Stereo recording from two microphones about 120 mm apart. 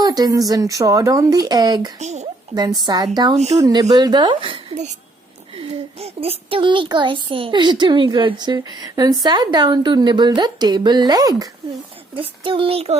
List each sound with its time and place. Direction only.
0.0 s speech: 30° right (ahead or behind)
2.0 s speech: 75° right (ahead or behind)
2.6 s speech: 35° right (ahead or behind)
3.3 s speech: 65° right (ahead or behind)
3.6 s speech: 35° right (ahead or behind)
12.1 s a child's voice: 45° right (ahead or behind)